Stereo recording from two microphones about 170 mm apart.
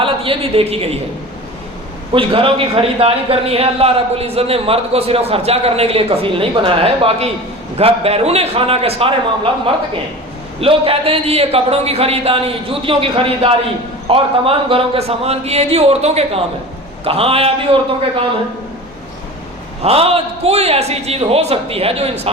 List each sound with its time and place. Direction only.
0.0 s a woman's voice: 35° right (ahead or behind)
2.1 s a man's voice: 35° right (ahead or behind)
10.6 s a man's voice: 35° right (ahead or behind)
19.8 s a man's voice: 35° right (ahead or behind)